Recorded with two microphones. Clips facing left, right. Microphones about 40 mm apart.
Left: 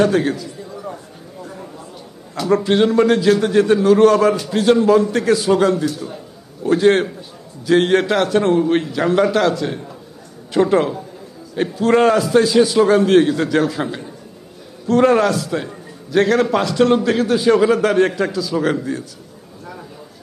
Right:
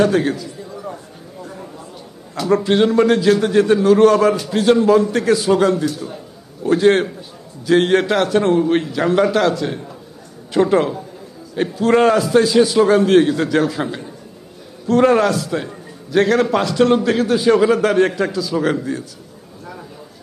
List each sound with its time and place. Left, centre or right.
0.0 s a man's voice: centre
1.4 s a sound: centre
2.3 s a man's voice: centre